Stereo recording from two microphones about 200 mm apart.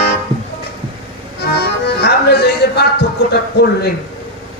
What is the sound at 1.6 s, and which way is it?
Music, 55° left (ahead or behind).